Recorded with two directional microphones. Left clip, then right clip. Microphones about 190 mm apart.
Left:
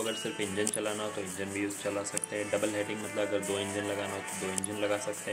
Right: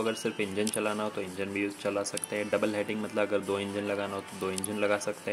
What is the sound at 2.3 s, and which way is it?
Speech, 20° right (ahead or behind).